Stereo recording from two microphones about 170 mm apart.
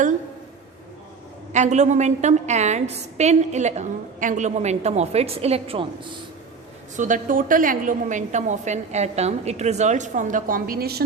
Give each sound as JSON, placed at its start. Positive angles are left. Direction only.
{"t": 1.5, "sound": "a woman's voice", "side_deg": -45}
{"t": 6.9, "sound": "a woman's voice", "side_deg": -45}